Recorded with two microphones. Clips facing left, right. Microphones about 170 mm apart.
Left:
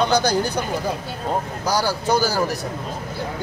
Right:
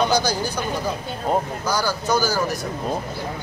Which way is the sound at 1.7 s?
30° left (ahead or behind).